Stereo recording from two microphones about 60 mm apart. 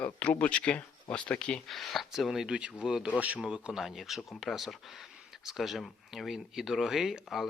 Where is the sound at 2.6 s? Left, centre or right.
Centre.